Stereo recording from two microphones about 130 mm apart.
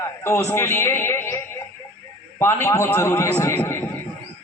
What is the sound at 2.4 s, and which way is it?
A man's voice, 20° left (ahead or behind).